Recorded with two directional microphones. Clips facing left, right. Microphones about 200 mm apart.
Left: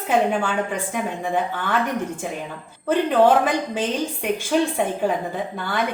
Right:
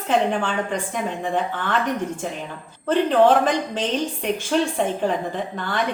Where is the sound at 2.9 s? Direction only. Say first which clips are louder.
Even; 10° left (ahead or behind).